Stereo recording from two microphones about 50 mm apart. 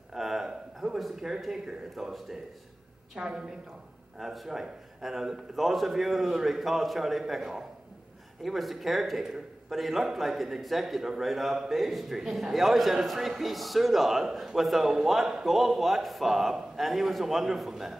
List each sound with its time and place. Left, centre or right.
0.1 s a sound: centre
0.9 s speech: centre
3.2 s a woman's voice: centre
4.2 s speech: centre